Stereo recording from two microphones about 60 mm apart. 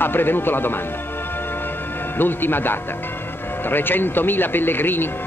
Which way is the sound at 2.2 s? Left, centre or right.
Left.